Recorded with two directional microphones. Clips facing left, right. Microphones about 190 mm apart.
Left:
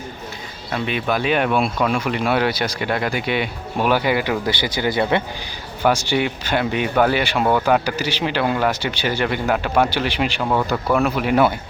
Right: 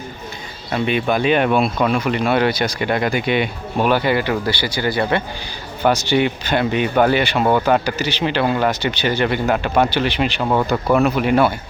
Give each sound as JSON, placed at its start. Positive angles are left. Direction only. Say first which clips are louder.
{"t": 0.7, "sound": "speech", "louder": "right 3 dB", "side_deg": 0}
{"t": 7.4, "sound": "speech", "louder": "right 1 dB", "side_deg": -5}
{"t": 7.7, "sound": "speech", "louder": "right 1 dB", "side_deg": 10}
{"t": 10.4, "sound": "speech", "louder": "right 3 dB", "side_deg": -10}
{"t": 10.9, "sound": "speech", "louder": "right 3 dB", "side_deg": 0}